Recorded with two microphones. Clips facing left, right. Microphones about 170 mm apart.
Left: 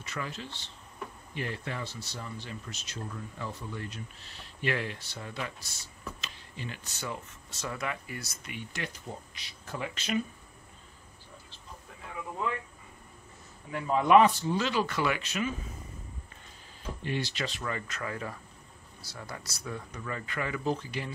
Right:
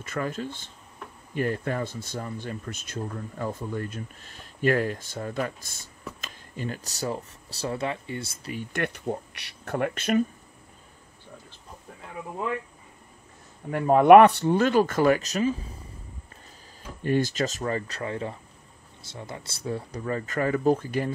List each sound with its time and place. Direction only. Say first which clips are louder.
0.0 s speech: right 8 dB; 50° right (ahead or behind); by 8.5 s 25° right (ahead or behind)
8.5 s speech: right 9 dB; 55° right (ahead or behind)
13.7 s speech: right 10 dB; 55° right (ahead or behind); by 15.7 s 35° right (ahead or behind)
17.0 s speech: right 9 dB; 45° right (ahead or behind)